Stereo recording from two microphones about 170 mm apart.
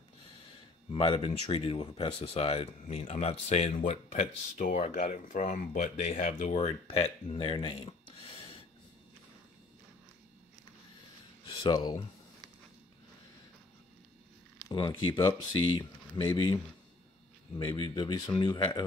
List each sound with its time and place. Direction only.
0.9 s speech: 30° left (ahead or behind)
11.4 s speech: 30° left (ahead or behind)
14.7 s speech: 30° left (ahead or behind)
17.6 s speech: 30° left (ahead or behind)